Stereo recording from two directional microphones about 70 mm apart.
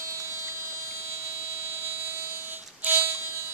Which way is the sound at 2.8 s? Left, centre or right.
Right.